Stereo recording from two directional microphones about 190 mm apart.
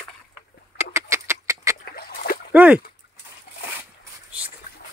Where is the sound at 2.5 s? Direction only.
5° right (ahead or behind).